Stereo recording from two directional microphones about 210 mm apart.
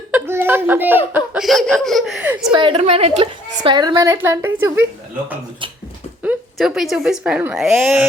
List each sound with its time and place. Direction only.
0.1 s a child's voice: 10° right (ahead or behind)
2.5 s a woman's voice: 25° right (ahead or behind)
6.2 s speech: 5° right (ahead or behind)